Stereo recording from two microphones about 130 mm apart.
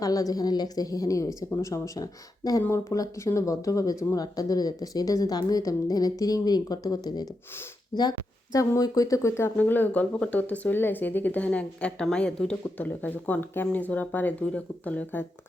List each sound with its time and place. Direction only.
0.0 s speech: 30° left (ahead or behind)
8.5 s speech: 25° left (ahead or behind)